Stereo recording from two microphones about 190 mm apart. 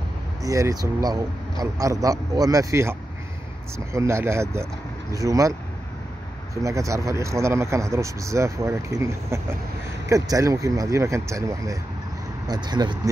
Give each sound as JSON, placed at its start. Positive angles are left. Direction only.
{"t": 0.4, "sound": "speech", "side_deg": -15}
{"t": 6.5, "sound": "speech", "side_deg": -15}